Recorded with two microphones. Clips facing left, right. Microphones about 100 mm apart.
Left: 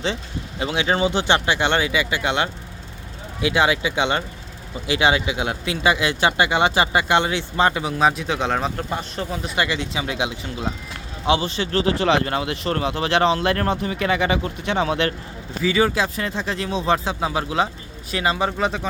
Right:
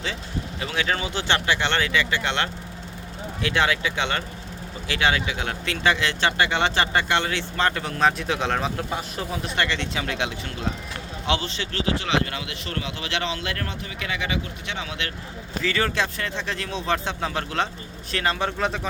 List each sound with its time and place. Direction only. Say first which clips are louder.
0.6 s speech: left 7 dB; 20° left (ahead or behind); by 9.5 s centre (ahead or behind)
9.6 s speech: left 3 dB; 10° left (ahead or behind)
11.5 s speech: left 6 dB; 40° left (ahead or behind)
15.6 s speech: left 5 dB; 10° left (ahead or behind)